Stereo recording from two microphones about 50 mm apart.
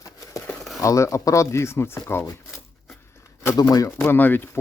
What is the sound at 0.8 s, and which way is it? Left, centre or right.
Speech, left.